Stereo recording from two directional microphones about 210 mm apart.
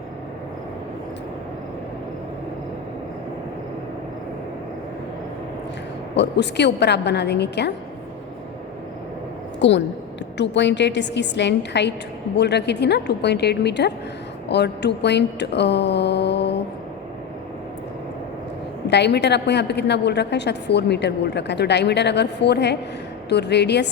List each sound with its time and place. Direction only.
6.1 s a woman's voice: 55° left (ahead or behind)
9.6 s a woman's voice: 60° left (ahead or behind)
18.9 s a woman's voice: 55° left (ahead or behind)